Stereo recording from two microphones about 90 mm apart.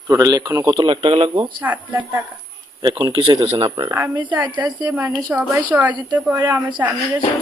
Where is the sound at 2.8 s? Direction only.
55° right (ahead or behind).